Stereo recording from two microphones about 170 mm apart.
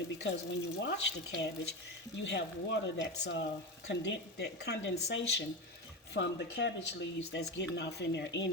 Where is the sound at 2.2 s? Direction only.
90° left.